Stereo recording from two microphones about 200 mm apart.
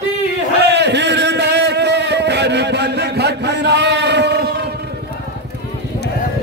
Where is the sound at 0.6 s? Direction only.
60° right (ahead or behind).